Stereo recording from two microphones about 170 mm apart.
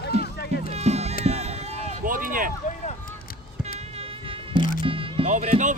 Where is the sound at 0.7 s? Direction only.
40° right (ahead or behind).